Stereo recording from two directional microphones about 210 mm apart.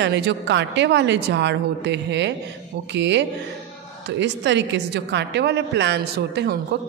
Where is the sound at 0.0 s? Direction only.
55° right (ahead or behind).